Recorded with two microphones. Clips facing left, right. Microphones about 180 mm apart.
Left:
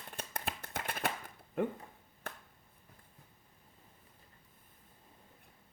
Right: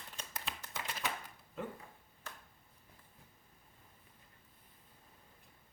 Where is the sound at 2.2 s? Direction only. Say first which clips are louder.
Left 5 dB; 55° left (ahead or behind).